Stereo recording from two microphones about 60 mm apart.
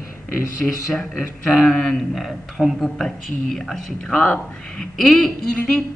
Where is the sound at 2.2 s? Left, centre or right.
Centre.